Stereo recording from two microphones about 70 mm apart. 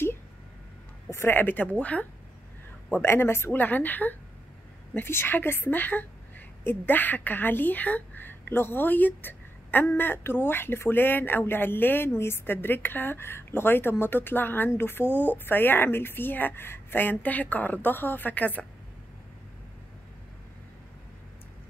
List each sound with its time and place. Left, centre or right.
1.1 s speech: left
2.9 s a woman's voice: left
3.5 s a woman's voice: left